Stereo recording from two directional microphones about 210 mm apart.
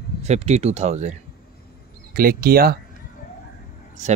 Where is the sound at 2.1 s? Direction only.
45° right (ahead or behind).